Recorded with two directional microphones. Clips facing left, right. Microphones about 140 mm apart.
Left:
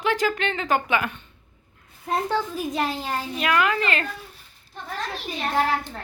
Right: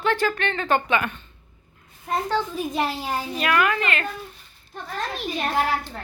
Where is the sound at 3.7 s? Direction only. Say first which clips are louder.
Left 1 dB; 35° left (ahead or behind).